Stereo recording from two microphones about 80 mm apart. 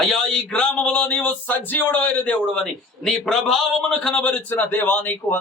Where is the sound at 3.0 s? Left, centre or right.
Centre.